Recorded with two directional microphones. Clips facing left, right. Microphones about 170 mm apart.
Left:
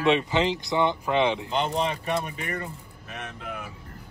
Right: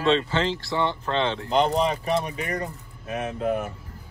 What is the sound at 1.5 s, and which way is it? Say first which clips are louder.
Speech: right 5 dB; 35° right (ahead or behind).